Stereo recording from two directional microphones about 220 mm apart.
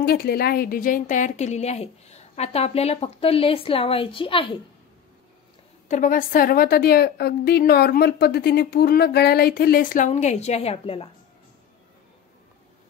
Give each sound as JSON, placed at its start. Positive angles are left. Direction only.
{"t": 0.0, "sound": "a woman's voice", "side_deg": 45}
{"t": 5.9, "sound": "a woman's voice", "side_deg": 35}